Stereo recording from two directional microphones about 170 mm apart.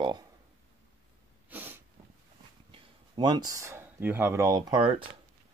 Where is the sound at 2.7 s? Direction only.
30° right (ahead or behind).